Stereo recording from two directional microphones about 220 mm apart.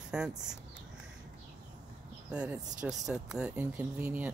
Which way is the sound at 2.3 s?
5° right (ahead or behind).